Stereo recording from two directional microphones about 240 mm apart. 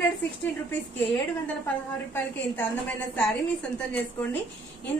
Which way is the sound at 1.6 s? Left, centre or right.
Centre.